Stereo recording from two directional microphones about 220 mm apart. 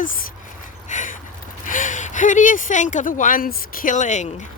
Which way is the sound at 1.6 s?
35° left (ahead or behind).